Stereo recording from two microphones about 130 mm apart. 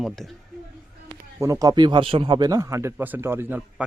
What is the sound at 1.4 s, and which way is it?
Speech, 25° right (ahead or behind).